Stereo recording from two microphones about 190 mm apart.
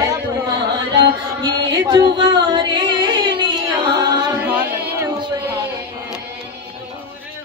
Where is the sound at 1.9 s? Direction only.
20° right (ahead or behind).